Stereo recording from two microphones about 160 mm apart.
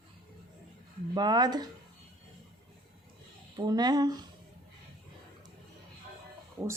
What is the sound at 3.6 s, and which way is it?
Speech, 25° right (ahead or behind).